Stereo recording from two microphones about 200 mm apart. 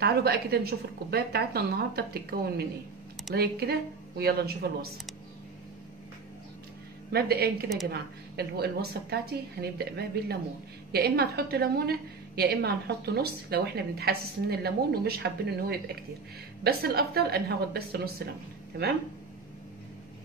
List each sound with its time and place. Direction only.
0.0 s a woman's voice: 55° right (ahead or behind)
7.1 s a woman's voice: 50° right (ahead or behind)